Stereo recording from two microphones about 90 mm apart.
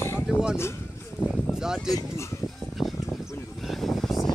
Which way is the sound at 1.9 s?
35° left (ahead or behind).